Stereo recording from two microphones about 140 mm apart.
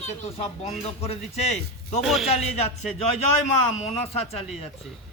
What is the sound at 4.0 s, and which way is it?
Speech, 45° left (ahead or behind).